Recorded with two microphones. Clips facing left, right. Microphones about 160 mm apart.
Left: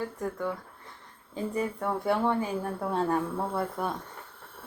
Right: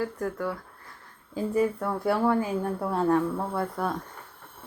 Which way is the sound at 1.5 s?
5° right (ahead or behind).